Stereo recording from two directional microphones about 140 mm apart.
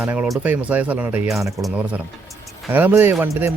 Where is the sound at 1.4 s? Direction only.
20° right (ahead or behind).